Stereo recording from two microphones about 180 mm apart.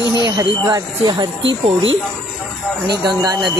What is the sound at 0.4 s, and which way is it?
Speech, 20° right (ahead or behind).